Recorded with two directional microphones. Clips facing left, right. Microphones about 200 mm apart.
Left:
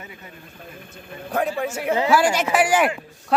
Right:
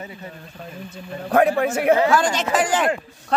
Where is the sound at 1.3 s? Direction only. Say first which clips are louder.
Right 6 dB; 70° right (ahead or behind).